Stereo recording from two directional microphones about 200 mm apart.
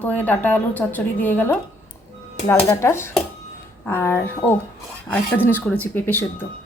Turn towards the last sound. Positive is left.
turn(degrees=10)  # may be behind; listen again after turning